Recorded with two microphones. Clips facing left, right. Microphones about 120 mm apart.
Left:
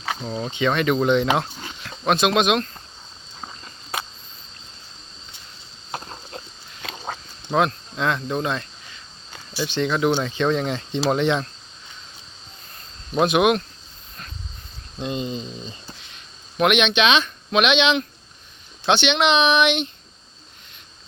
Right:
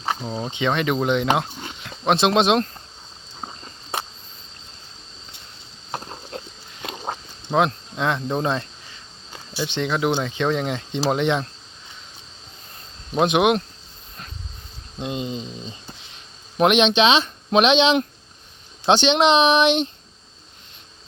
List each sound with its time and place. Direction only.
0.3 s speech: 20° right (ahead or behind)
1.6 s wild animals: 25° right (ahead or behind)
7.5 s speech: 20° right (ahead or behind)
13.1 s speech: 20° right (ahead or behind)
14.9 s speech: 15° right (ahead or behind)
16.6 s speech: 30° right (ahead or behind)